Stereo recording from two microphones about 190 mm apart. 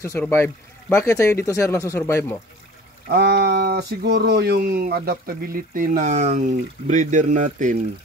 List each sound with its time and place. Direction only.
0.0 s speech: 15° left (ahead or behind)
3.1 s a man's voice: 60° right (ahead or behind); by 7.7 s 40° right (ahead or behind)